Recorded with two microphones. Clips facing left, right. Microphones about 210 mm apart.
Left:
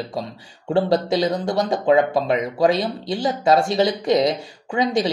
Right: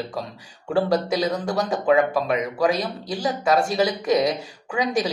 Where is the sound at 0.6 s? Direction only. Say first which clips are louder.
Left 2 dB; 25° left (ahead or behind).